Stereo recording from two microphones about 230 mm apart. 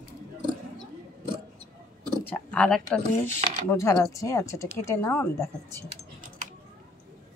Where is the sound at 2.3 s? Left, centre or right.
Centre.